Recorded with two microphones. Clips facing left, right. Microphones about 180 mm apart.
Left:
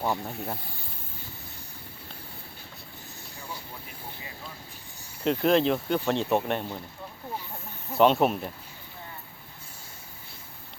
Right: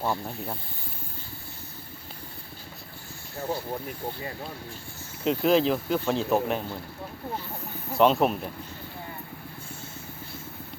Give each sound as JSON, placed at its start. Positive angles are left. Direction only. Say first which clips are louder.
{"t": 0.0, "sound": "speech", "louder": "even", "side_deg": 0}
{"t": 3.3, "sound": "speech", "louder": "right 11 dB", "side_deg": -60}
{"t": 5.2, "sound": "speech", "louder": "even", "side_deg": 0}
{"t": 7.9, "sound": "speech", "louder": "even", "side_deg": 0}